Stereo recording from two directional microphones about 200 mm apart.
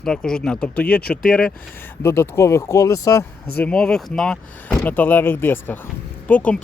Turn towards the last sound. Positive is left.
turn(degrees=5)  # may be behind; listen again after turning